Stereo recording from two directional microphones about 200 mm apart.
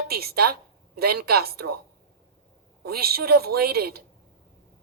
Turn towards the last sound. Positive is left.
turn(degrees=-50)  # may be behind; listen again after turning